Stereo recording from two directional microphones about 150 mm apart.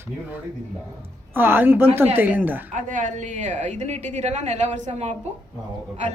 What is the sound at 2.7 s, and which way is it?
Speech, 60° right (ahead or behind).